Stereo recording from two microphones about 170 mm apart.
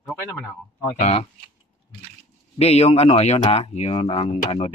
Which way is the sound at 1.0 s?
40° left (ahead or behind).